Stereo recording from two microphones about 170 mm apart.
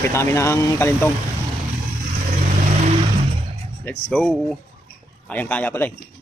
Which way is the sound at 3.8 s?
10° left (ahead or behind).